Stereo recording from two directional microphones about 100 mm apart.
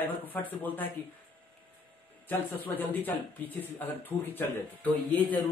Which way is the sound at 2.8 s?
20° left (ahead or behind).